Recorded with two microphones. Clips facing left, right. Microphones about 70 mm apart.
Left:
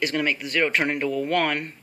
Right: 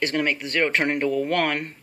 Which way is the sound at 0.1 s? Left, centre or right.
Right.